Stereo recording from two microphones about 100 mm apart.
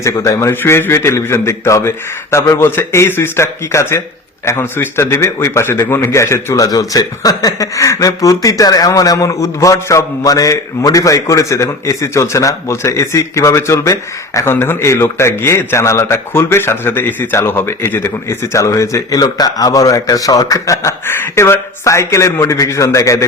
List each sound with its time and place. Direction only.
0.0 s a man's voice: 30° left (ahead or behind)